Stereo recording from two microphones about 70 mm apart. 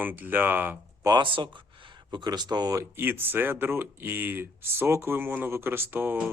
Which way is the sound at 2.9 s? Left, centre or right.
Right.